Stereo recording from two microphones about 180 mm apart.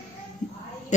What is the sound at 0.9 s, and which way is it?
Speech, 40° left (ahead or behind).